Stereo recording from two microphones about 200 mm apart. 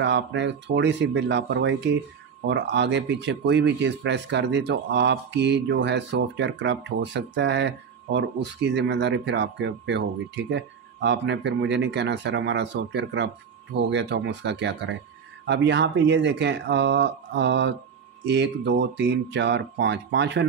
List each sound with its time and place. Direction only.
0.0 s speech: 60° right (ahead or behind)